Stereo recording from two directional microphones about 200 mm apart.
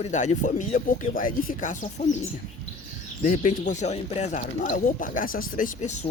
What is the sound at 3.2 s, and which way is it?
Speech, 40° left (ahead or behind).